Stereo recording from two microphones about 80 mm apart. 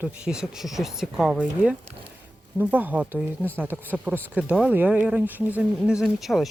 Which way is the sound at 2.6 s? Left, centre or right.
Centre.